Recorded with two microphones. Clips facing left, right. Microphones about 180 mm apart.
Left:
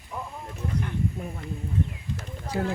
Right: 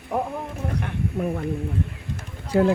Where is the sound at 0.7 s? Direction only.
70° right (ahead or behind).